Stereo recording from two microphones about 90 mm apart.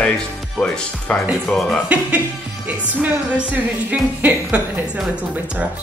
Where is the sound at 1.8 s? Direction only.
15° right (ahead or behind).